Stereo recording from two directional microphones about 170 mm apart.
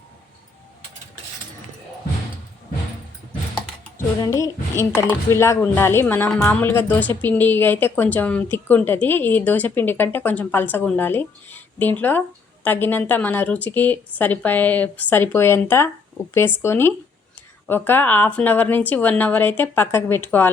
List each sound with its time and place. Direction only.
3.9 s a woman's voice: 15° left (ahead or behind)